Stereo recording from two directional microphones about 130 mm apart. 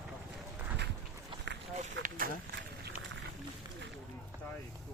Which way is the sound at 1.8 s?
90° right.